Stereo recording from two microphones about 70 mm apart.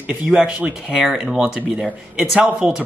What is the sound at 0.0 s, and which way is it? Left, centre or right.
Speech, centre.